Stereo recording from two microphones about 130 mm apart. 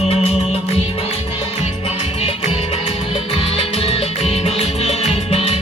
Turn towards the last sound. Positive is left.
turn(degrees=50)  # may be behind; listen again after turning